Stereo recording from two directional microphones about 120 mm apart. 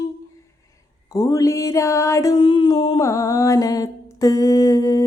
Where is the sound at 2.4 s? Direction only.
45° left (ahead or behind).